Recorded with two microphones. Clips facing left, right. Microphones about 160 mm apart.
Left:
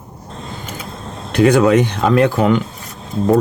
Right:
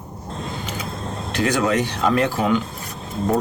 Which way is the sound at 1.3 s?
60° left (ahead or behind).